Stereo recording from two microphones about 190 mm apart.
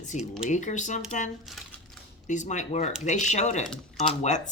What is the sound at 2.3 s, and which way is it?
Speech, 40° left (ahead or behind).